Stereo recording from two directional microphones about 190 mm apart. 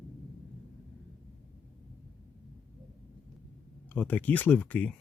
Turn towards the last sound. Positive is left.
turn(degrees=10)  # may be behind; listen again after turning